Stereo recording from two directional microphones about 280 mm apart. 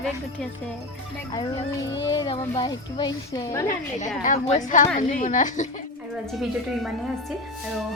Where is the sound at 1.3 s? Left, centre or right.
Centre.